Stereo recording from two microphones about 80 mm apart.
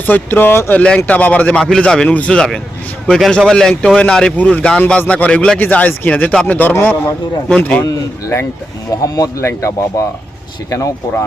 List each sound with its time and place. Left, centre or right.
0.0 s speech: left
0.7 s a man's voice: centre
7.9 s speech: left